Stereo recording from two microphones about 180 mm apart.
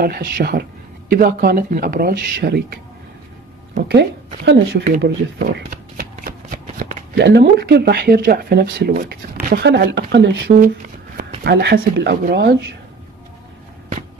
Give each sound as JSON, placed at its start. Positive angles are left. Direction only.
{"t": 0.0, "sound": "speech", "side_deg": -60}
{"t": 5.4, "sound": "speech", "side_deg": -55}
{"t": 11.1, "sound": "speech", "side_deg": -55}